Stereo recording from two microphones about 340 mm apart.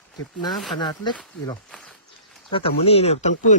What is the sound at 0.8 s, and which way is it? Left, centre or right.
Speech, centre.